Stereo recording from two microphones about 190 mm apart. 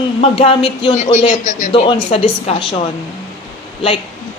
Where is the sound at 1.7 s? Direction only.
30° left (ahead or behind).